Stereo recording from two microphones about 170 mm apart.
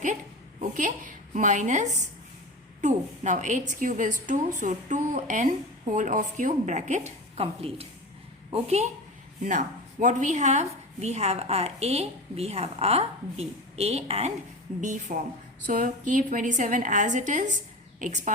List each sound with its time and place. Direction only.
0.6 s a woman's voice: 50° right (ahead or behind)
7.3 s a woman's voice: 35° right (ahead or behind)